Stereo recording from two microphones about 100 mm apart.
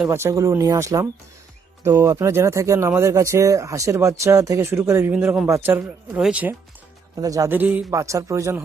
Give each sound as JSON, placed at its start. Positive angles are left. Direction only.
{"t": 0.1, "sound": "speech", "side_deg": -30}
{"t": 5.1, "sound": "speech", "side_deg": -15}
{"t": 5.5, "sound": "speech", "side_deg": -25}
{"t": 5.8, "sound": "speech", "side_deg": -5}
{"t": 7.2, "sound": "speech", "side_deg": -35}
{"t": 7.5, "sound": "speech", "side_deg": -15}
{"t": 7.9, "sound": "speech", "side_deg": -30}